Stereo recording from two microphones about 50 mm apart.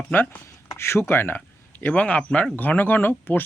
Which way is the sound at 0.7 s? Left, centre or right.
Left.